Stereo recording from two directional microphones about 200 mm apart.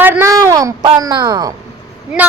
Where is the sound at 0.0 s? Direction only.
10° right (ahead or behind).